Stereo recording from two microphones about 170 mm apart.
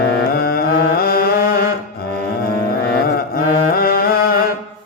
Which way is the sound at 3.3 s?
60° left (ahead or behind).